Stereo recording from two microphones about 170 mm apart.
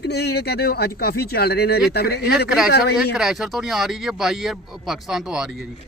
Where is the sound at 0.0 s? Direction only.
75° left (ahead or behind).